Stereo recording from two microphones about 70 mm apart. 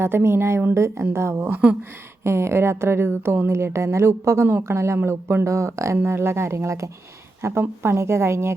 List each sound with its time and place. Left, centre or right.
0.0 s a woman's voice: right
6.0 s a woman's voice: right
7.4 s a woman's voice: right